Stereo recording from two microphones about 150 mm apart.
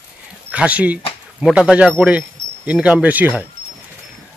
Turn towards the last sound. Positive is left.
turn(degrees=-10)  # may be behind; listen again after turning